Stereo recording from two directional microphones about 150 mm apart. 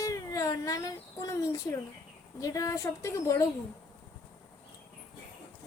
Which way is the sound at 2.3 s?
25° left (ahead or behind).